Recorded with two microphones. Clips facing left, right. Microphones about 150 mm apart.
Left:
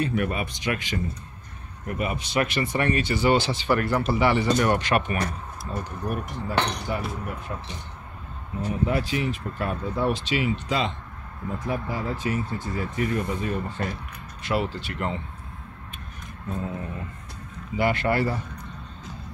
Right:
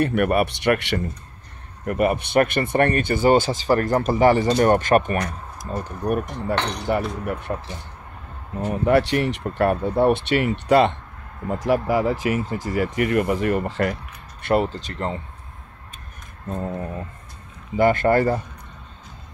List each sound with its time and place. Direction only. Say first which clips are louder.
0.0 s speech: right 7 dB; 65° right (ahead or behind); by 5.9 s 45° right (ahead or behind)
6.0 s speech: right 8 dB; 55° right (ahead or behind)
8.5 s speech: right 7 dB; 65° right (ahead or behind)
11.6 s speech: right 10 dB; 90° right
14.4 s speech: right 6 dB; 50° right (ahead or behind)
16.4 s speech: right 3 dB; 45° right (ahead or behind)
17.7 s speech: right 6 dB; 45° right (ahead or behind)